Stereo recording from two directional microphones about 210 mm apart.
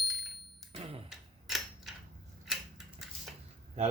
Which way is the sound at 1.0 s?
Centre (ahead or behind).